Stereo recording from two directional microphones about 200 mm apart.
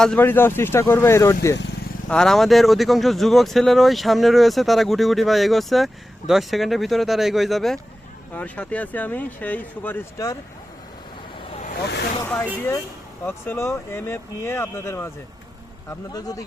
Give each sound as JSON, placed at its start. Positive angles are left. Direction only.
{"t": 0.0, "sound": "speech", "side_deg": 5}
{"t": 2.0, "sound": "speech", "side_deg": 5}
{"t": 11.4, "sound": "vehicle", "side_deg": 30}
{"t": 11.7, "sound": "speech", "side_deg": 55}
{"t": 12.2, "sound": "vehicle", "side_deg": 15}
{"t": 13.2, "sound": "speech", "side_deg": 10}